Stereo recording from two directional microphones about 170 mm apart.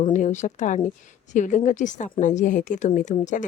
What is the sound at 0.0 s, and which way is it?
Speech, 45° left (ahead or behind).